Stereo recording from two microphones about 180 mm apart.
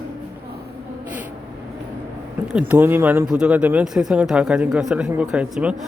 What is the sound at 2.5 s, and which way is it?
Speech, 5° right (ahead or behind).